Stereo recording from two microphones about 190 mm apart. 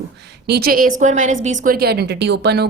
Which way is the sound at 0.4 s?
55° right (ahead or behind).